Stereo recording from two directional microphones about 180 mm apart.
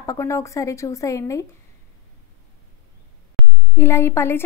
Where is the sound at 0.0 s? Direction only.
20° left (ahead or behind).